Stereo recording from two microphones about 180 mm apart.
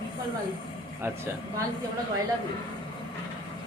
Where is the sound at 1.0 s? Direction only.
15° right (ahead or behind).